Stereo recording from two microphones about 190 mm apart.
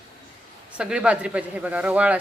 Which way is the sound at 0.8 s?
5° right (ahead or behind).